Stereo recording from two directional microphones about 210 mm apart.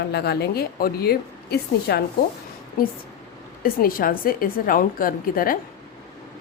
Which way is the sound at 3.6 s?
40° left (ahead or behind).